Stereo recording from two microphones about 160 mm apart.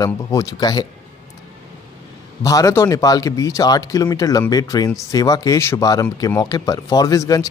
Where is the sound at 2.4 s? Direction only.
20° left (ahead or behind).